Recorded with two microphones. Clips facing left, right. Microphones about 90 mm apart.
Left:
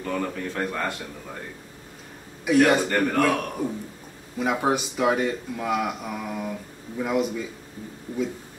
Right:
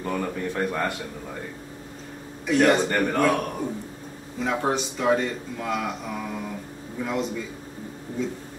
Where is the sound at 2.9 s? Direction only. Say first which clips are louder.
Left 1 dB; 5° right (ahead or behind).